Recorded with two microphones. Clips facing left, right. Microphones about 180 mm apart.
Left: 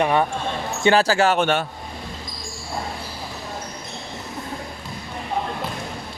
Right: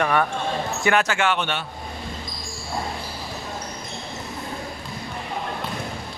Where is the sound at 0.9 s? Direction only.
30° left (ahead or behind).